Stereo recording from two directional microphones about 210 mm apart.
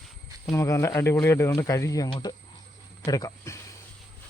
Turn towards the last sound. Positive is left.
turn(degrees=15)  # may be behind; listen again after turning